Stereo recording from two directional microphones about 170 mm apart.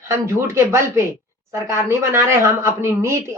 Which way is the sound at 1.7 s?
15° right (ahead or behind).